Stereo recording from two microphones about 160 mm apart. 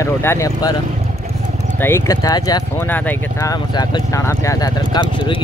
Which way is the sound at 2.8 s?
10° left (ahead or behind).